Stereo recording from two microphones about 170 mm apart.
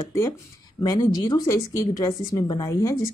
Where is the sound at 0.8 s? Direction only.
20° left (ahead or behind).